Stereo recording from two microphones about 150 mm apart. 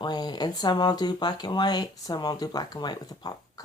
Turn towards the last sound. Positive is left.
turn(degrees=25)  # may be behind; listen again after turning